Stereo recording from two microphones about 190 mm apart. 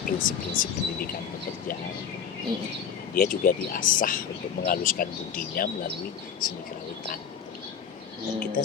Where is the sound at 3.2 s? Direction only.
50° left (ahead or behind).